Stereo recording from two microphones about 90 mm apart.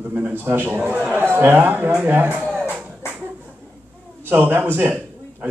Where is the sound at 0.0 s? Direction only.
20° right (ahead or behind).